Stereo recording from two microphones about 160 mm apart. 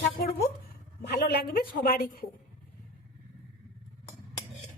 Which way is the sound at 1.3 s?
80° left.